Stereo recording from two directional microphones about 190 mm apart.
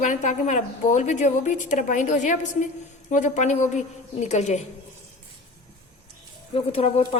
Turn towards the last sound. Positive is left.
turn(degrees=30)  # may be behind; listen again after turning